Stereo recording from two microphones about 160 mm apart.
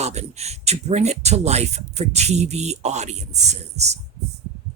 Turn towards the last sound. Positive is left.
turn(degrees=-45)  # may be behind; listen again after turning